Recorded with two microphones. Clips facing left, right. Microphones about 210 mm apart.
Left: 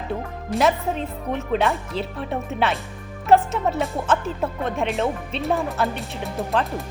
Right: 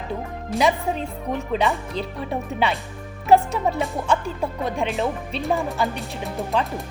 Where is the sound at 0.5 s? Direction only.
Centre (ahead or behind).